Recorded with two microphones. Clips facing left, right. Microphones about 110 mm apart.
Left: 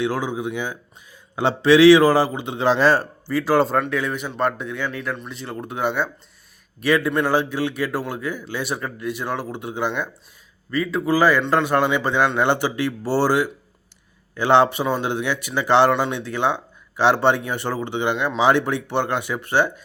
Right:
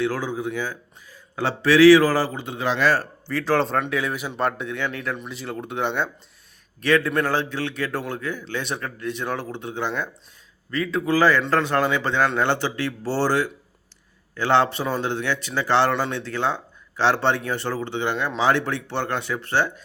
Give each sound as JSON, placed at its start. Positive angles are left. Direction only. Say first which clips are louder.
{"t": 0.0, "sound": "a man's voice", "louder": "left 1 dB", "side_deg": 15}
{"t": 2.6, "sound": "speech", "louder": "left 4 dB", "side_deg": 30}
{"t": 3.2, "sound": "a man's voice", "louder": "left 3 dB", "side_deg": 10}
{"t": 3.8, "sound": "a man's voice", "louder": "left 1 dB", "side_deg": 0}